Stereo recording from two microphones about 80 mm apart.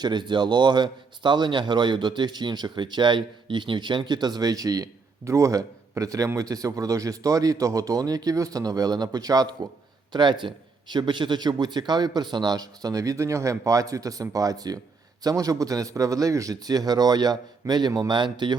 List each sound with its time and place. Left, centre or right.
0.0 s speech: right
10.1 s a man's voice: right
18.1 s speech: right